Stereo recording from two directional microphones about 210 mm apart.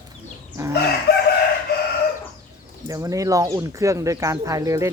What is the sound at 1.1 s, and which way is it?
Chicken, 50° left (ahead or behind).